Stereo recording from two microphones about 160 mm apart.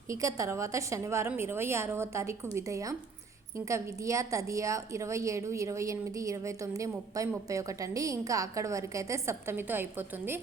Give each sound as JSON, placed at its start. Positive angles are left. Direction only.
{"t": 0.1, "sound": "a woman's voice", "side_deg": -20}